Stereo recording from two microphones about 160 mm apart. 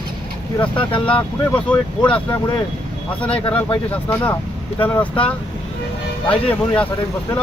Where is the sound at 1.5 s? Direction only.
10° left (ahead or behind).